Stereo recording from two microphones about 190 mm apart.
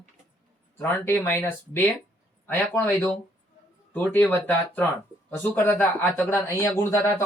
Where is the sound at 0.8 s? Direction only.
10° left (ahead or behind).